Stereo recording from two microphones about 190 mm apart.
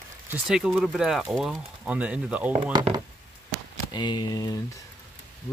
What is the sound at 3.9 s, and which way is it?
Speech, 20° left (ahead or behind).